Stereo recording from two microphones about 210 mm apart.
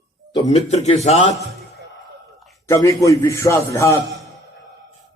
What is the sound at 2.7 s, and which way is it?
Speech, 15° left (ahead or behind).